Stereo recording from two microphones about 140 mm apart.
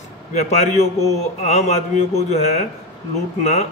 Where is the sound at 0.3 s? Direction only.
55° left (ahead or behind).